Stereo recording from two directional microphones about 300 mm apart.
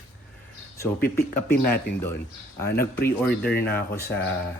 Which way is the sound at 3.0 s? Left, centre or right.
Left.